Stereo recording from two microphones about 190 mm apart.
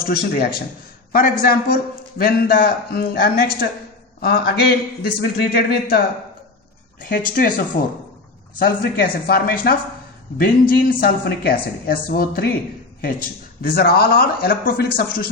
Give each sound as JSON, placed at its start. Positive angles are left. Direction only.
{"t": 0.0, "sound": "a man's voice", "side_deg": 55}
{"t": 7.0, "sound": "a man's voice", "side_deg": 45}